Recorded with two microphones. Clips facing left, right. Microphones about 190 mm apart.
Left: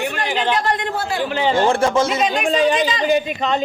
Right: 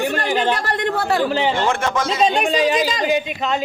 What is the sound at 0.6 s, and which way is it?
Speech, 65° right (ahead or behind).